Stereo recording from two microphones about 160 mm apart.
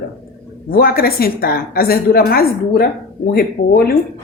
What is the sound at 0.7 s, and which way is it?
A woman's voice, 70° left (ahead or behind).